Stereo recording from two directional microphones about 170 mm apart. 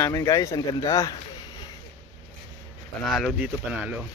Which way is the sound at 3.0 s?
Centre (ahead or behind).